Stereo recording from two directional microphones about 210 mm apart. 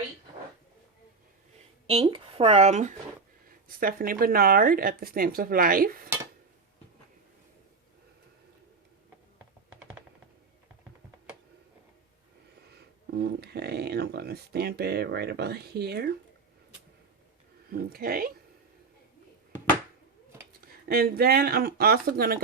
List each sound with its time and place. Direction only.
1.9 s speech: 25° right (ahead or behind)
3.8 s speech: 45° right (ahead or behind)
13.1 s speech: 50° right (ahead or behind)
17.7 s speech: 45° right (ahead or behind)
20.8 s speech: 50° right (ahead or behind)